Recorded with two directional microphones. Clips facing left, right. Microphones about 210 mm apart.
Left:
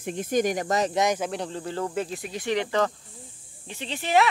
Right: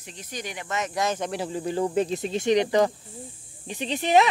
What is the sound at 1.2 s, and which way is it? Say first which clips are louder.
Speech: right 1 dB; 5° right (ahead or behind).